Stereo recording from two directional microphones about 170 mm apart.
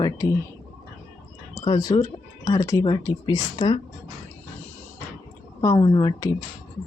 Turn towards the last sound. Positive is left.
turn(degrees=20)  # may be behind; listen again after turning